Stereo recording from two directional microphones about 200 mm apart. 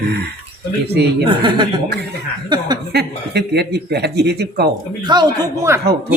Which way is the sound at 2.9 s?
55° right (ahead or behind).